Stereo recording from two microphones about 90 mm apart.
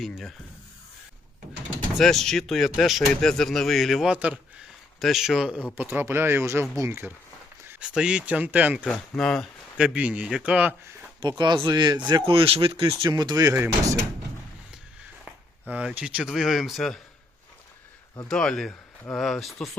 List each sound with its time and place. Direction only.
0.0 s speech: centre (ahead or behind)
2.0 s speech: 5° left (ahead or behind); by 4.4 s 15° right (ahead or behind)
4.9 s speech: centre (ahead or behind)
5.7 s speech: 20° right (ahead or behind)
7.8 s speech: 10° right (ahead or behind)
8.8 s speech: 5° left (ahead or behind)
9.7 s speech: 15° right (ahead or behind)
11.2 s speech: 55° right (ahead or behind)
12.2 s speech: 90° right
13.1 s speech: 50° right (ahead or behind)
15.7 s speech: 15° right (ahead or behind)
16.3 s speech: centre (ahead or behind)
18.3 s speech: 10° left (ahead or behind)